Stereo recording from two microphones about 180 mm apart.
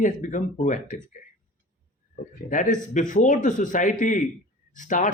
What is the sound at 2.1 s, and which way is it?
A man's voice, 45° left (ahead or behind).